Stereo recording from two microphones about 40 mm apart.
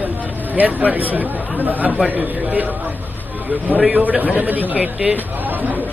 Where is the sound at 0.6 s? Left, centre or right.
Right.